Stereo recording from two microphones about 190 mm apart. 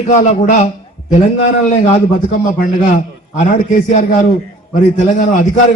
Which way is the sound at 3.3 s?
40° left (ahead or behind).